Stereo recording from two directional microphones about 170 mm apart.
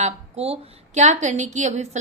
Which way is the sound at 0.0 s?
35° right (ahead or behind).